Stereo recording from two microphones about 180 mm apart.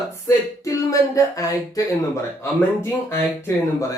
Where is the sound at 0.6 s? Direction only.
20° left (ahead or behind).